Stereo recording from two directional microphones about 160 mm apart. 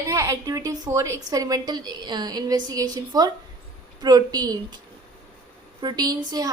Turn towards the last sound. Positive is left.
turn(degrees=-25)  # may be behind; listen again after turning